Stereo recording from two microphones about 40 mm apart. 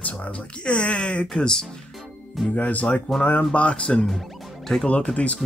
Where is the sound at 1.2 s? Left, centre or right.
Centre.